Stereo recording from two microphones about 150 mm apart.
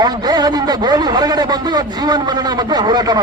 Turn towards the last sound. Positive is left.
turn(degrees=-25)  # may be behind; listen again after turning